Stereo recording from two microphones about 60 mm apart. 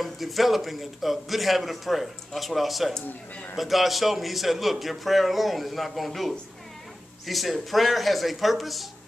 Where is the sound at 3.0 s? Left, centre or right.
Left.